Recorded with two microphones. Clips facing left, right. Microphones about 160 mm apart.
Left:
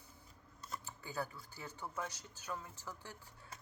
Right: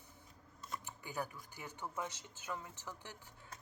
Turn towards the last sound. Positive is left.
turn(degrees=-20)  # may be behind; listen again after turning